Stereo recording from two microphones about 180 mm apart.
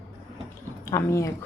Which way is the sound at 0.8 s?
15° left (ahead or behind).